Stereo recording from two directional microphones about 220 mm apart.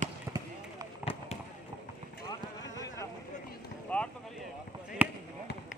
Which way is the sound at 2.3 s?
15° left (ahead or behind).